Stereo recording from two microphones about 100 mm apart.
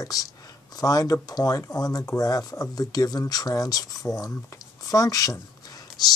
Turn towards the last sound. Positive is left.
turn(degrees=35)  # may be behind; listen again after turning